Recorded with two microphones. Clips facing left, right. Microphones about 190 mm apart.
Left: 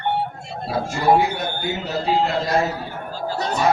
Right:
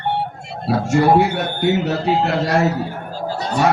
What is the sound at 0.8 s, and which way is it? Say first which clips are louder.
Speech: right 4 dB; 65° right (ahead or behind).